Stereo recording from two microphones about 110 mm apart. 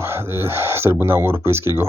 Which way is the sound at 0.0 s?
25° right (ahead or behind).